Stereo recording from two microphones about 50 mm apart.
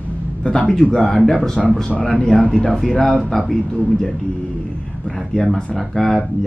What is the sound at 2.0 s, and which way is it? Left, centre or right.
Speech, centre.